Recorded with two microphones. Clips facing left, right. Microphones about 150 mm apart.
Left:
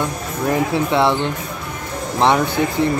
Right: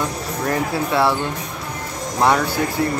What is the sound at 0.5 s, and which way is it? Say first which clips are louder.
Speech: left 4 dB; 20° left (ahead or behind).